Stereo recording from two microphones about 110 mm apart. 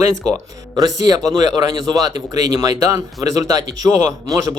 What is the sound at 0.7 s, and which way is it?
Speech, 35° right (ahead or behind).